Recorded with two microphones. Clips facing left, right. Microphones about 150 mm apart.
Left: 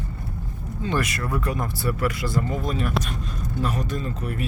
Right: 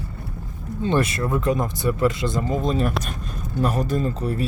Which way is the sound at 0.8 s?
30° right (ahead or behind).